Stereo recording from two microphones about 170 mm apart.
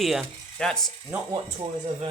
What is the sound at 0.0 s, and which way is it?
Speech, centre (ahead or behind).